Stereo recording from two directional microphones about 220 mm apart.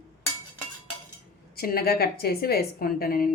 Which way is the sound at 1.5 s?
45° left (ahead or behind).